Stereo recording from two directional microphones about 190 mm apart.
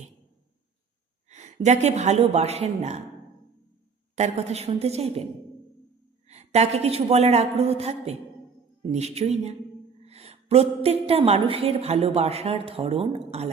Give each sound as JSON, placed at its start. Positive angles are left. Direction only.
{"t": 1.3, "sound": "a woman's voice", "side_deg": -35}
{"t": 4.1, "sound": "a woman's voice", "side_deg": -35}
{"t": 6.2, "sound": "a woman's voice", "side_deg": -35}